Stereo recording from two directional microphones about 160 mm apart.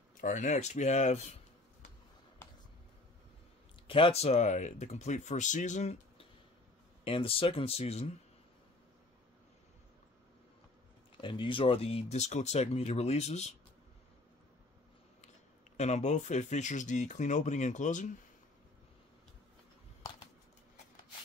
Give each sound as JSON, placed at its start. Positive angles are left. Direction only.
{"t": 0.2, "sound": "speech", "side_deg": 50}
{"t": 3.8, "sound": "speech", "side_deg": 35}
{"t": 7.1, "sound": "speech", "side_deg": 35}
{"t": 11.1, "sound": "speech", "side_deg": 30}
{"t": 15.8, "sound": "speech", "side_deg": 45}